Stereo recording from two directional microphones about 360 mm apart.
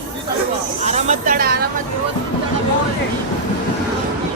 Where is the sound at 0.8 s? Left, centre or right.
Centre.